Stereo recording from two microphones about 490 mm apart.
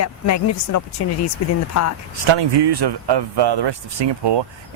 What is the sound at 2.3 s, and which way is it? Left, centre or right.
Speech, right.